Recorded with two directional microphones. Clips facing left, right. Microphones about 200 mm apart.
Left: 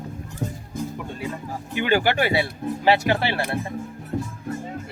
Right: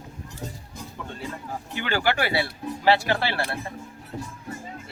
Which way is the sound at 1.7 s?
15° left (ahead or behind).